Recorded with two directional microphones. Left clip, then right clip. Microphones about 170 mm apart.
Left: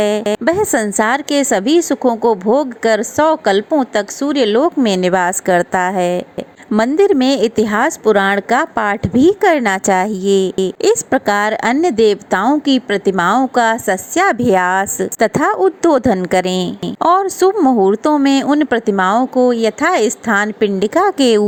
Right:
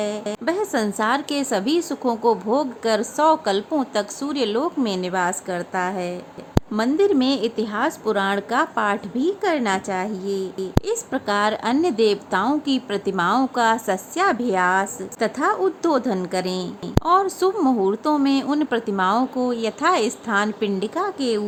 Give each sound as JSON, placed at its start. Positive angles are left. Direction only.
{"t": 0.0, "sound": "a woman's voice", "side_deg": 45}